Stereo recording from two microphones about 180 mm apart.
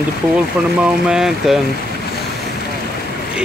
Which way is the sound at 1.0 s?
5° right (ahead or behind).